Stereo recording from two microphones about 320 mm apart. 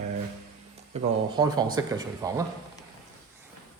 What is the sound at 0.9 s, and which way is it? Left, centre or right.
Speech, centre.